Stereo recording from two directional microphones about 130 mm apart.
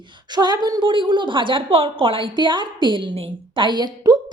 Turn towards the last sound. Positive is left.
turn(degrees=-30)  # may be behind; listen again after turning